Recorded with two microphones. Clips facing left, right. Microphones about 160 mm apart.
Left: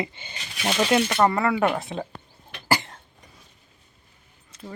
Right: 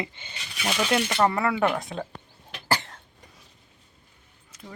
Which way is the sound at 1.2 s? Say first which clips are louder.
Left 2 dB; centre (ahead or behind).